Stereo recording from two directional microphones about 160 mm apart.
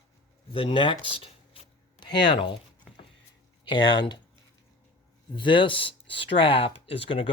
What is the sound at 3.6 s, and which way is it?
Speech, 30° left (ahead or behind).